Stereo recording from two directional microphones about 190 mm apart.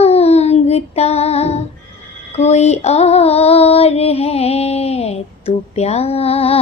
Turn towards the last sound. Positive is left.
turn(degrees=30)  # may be behind; listen again after turning